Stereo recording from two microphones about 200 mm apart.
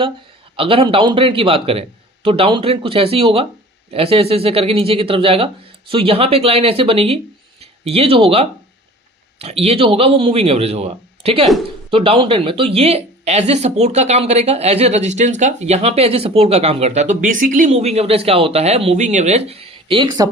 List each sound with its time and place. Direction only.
0.5 s speech: 25° right (ahead or behind)